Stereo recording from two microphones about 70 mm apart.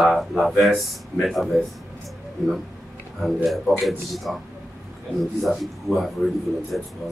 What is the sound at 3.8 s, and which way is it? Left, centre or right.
Speech, centre.